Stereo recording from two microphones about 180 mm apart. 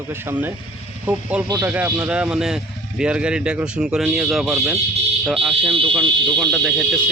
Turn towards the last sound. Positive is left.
turn(degrees=0)  # may be behind; listen again after turning